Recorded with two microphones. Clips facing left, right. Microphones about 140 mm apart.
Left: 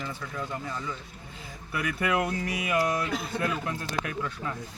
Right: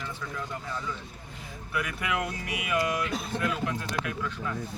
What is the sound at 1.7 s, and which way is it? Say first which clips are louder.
Speech: left 3 dB; 35° left (ahead or behind).